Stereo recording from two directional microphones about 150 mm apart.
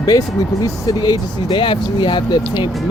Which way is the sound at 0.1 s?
25° left (ahead or behind).